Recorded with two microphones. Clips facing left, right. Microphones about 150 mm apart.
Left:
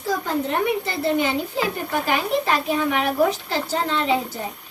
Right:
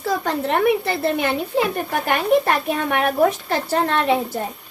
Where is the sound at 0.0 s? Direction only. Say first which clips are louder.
Right 2 dB; 75° right (ahead or behind).